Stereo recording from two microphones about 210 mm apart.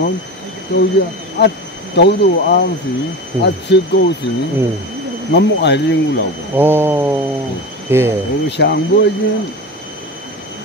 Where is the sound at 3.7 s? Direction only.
55° left (ahead or behind).